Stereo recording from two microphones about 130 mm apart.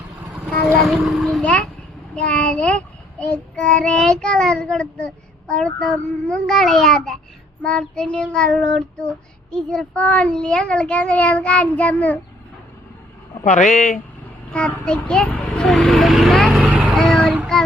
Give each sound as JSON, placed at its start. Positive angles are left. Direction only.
{"t": 0.8, "sound": "a child's voice", "side_deg": 0}
{"t": 2.1, "sound": "child singing", "side_deg": 10}
{"t": 13.4, "sound": "speech", "side_deg": 70}
{"t": 14.5, "sound": "a child's voice", "side_deg": 5}
{"t": 16.6, "sound": "vehicle", "side_deg": -10}
{"t": 16.9, "sound": "child singing", "side_deg": 5}